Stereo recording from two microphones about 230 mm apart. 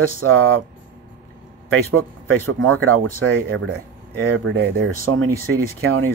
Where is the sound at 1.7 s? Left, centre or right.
Right.